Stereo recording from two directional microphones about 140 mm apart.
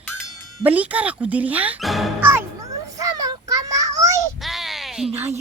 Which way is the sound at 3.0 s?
25° right (ahead or behind).